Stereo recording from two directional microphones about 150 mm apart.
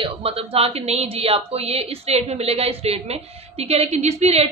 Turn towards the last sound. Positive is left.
turn(degrees=-45)  # may be behind; listen again after turning